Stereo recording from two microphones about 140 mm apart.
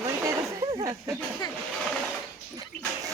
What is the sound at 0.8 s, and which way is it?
Speech, 20° right (ahead or behind).